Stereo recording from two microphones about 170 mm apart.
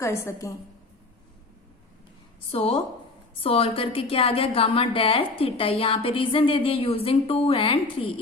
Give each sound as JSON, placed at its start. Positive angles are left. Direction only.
{"t": 0.0, "sound": "a woman's voice", "side_deg": 15}
{"t": 2.5, "sound": "a woman's voice", "side_deg": 35}